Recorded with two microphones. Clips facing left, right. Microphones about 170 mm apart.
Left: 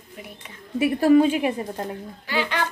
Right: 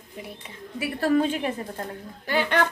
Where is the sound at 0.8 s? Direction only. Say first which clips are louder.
Left 6 dB; 15° left (ahead or behind).